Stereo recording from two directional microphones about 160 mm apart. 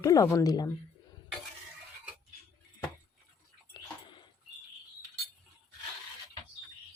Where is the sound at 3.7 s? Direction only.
30° left (ahead or behind).